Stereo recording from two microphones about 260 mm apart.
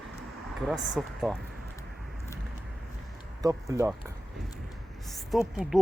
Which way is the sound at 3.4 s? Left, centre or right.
Centre.